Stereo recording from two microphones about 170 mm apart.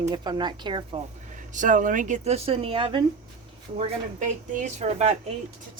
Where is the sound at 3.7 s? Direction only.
40° right (ahead or behind).